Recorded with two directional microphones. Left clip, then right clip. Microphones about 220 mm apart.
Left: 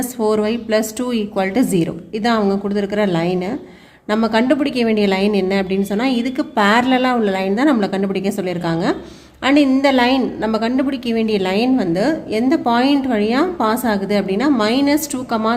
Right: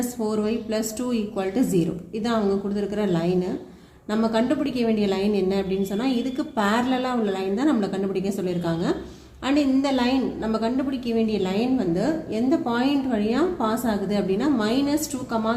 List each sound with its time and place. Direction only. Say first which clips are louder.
0.2 s a woman's voice: left 10 dB; 50° left (ahead or behind)